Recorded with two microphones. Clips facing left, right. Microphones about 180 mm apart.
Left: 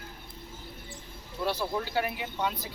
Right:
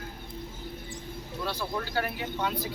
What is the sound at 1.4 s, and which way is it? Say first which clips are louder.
Speech: left 3 dB; 10° left (ahead or behind).